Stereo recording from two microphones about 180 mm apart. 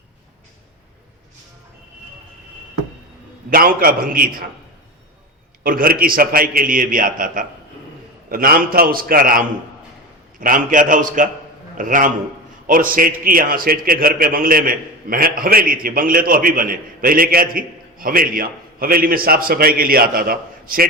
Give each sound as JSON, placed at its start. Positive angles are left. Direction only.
{"t": 3.5, "sound": "a man's voice", "side_deg": -55}
{"t": 5.6, "sound": "a man's voice", "side_deg": -55}